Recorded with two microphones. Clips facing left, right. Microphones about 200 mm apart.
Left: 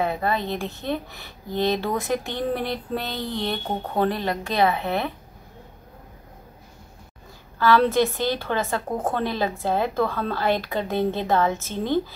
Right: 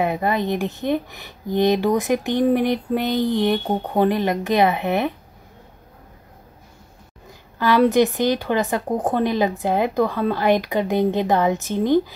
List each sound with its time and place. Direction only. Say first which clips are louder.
0.0 s speech: right 3 dB; 15° right (ahead or behind)
7.5 s speech: right 3 dB; 15° right (ahead or behind)